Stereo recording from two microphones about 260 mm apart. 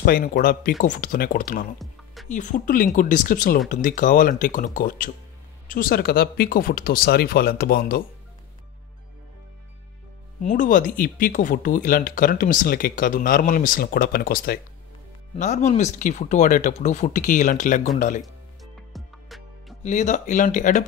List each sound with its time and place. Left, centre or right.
0.0 s speech: left
10.4 s speech: left
18.2 s music: centre
19.8 s speech: left